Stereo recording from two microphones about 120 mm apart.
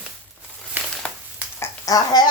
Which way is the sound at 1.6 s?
30° left (ahead or behind).